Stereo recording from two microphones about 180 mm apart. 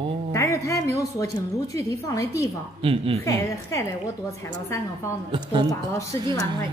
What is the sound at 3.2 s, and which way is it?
Speech, 15° left (ahead or behind).